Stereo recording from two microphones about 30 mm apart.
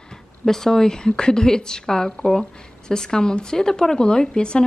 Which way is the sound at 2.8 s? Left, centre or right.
Left.